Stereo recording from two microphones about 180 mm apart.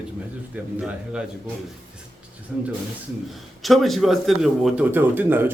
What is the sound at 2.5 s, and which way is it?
A man's voice, 5° right (ahead or behind).